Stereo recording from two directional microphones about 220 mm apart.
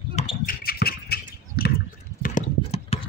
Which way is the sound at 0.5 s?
45° left (ahead or behind).